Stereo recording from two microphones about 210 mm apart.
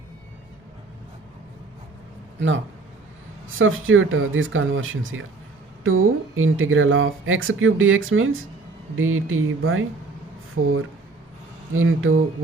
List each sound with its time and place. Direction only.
3.6 s speech: 70° right (ahead or behind)